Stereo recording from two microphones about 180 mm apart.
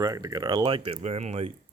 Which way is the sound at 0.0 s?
20° right (ahead or behind).